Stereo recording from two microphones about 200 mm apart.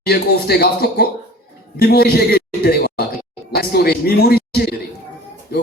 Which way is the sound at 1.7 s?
50° left (ahead or behind).